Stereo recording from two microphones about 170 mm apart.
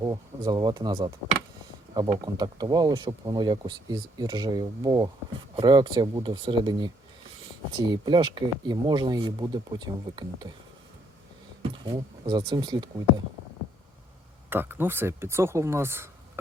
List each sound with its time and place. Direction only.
0.0 s speech: 20° right (ahead or behind)
11.9 s speech: 25° right (ahead or behind)
14.5 s speech: 10° right (ahead or behind)